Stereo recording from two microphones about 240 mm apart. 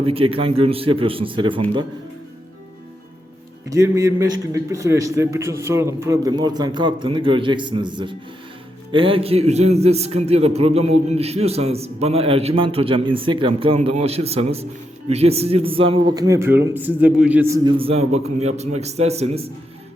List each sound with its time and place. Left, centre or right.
0.0 s a man's voice: right
3.7 s a man's voice: centre